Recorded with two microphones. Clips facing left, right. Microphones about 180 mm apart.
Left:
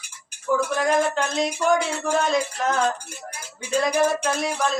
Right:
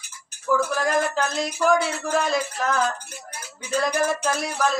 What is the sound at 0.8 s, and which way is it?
Speech, centre (ahead or behind).